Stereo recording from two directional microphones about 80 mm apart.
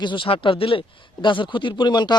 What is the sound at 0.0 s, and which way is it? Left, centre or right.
Speech, left.